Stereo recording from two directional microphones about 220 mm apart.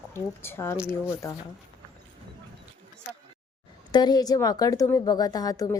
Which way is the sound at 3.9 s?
20° left (ahead or behind).